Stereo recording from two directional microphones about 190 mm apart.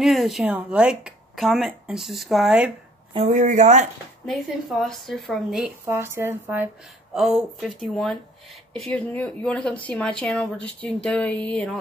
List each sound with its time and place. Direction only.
0.0 s speech: centre (ahead or behind)
3.3 s speech: 40° right (ahead or behind)
4.3 s speech: centre (ahead or behind)
5.9 s speech: 15° right (ahead or behind)
7.2 s speech: centre (ahead or behind)